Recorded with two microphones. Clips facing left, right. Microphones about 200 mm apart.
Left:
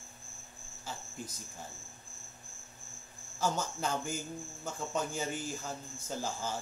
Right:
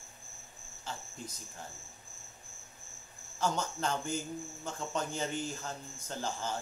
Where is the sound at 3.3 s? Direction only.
5° left (ahead or behind).